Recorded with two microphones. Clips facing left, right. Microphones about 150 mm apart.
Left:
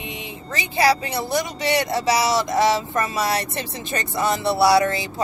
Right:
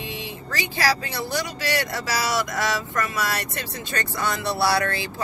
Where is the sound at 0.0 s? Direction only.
20° left (ahead or behind).